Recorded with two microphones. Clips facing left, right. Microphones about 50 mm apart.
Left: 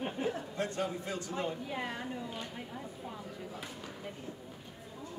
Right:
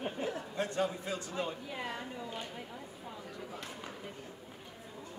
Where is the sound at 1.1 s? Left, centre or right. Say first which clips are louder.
Left 1 dB; left.